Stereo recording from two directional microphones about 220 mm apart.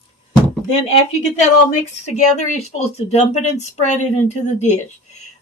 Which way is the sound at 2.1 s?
30° left (ahead or behind).